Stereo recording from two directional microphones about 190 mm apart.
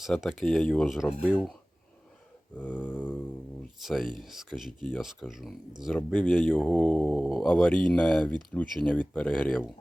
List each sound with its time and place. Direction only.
0.0 s speech: centre (ahead or behind)
2.6 s a sound: 5° left (ahead or behind)
3.8 s speech: centre (ahead or behind)
8.3 s speech: 25° right (ahead or behind)
8.5 s speech: 5° left (ahead or behind)